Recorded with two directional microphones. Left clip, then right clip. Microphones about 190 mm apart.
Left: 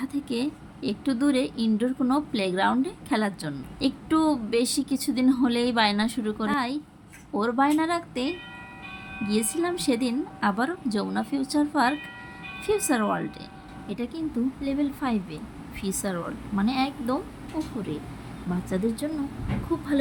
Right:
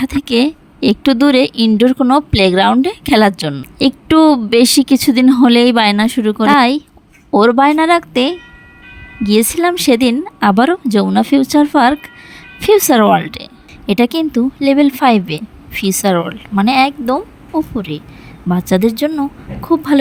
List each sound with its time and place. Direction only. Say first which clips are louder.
0.0 s speech: right 15 dB; 50° right (ahead or behind)